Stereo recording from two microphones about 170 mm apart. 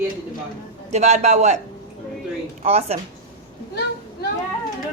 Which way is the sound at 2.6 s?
40° right (ahead or behind).